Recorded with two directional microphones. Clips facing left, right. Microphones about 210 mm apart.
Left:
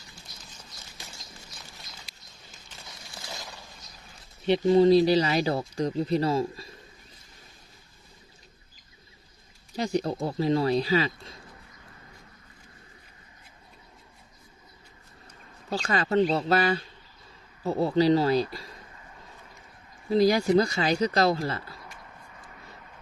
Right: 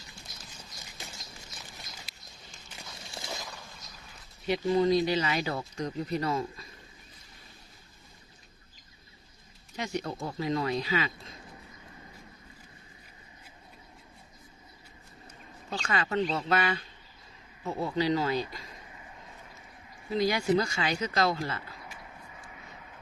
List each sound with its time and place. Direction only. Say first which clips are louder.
3.2 s a sound: right 2 dB; 20° right (ahead or behind)
4.4 s speech: left 6 dB; 30° left (ahead or behind)
9.7 s speech: left 7 dB; 35° left (ahead or behind)
15.7 s speech: left 5 dB; 35° left (ahead or behind)
20.1 s speech: left 5 dB; 35° left (ahead or behind)
22.4 s a sound: even; centre (ahead or behind)